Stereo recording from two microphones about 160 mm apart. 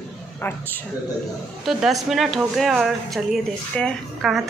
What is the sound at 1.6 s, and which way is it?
Speech, centre (ahead or behind).